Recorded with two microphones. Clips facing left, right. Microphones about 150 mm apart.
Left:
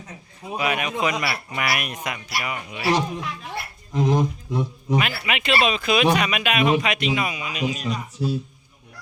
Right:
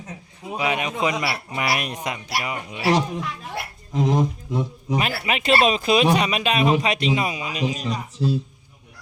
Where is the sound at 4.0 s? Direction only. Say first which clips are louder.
Even; centre (ahead or behind).